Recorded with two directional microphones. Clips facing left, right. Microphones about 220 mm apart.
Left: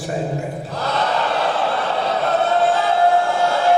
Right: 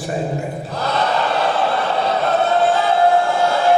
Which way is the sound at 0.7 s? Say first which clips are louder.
Right 2 dB; 15° right (ahead or behind).